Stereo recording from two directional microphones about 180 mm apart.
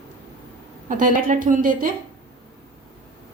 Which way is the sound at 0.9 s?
45° right (ahead or behind).